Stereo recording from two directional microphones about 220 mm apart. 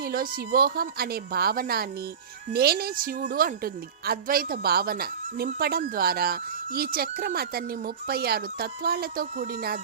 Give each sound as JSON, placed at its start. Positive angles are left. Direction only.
{"t": 0.0, "sound": "a woman's voice", "side_deg": -40}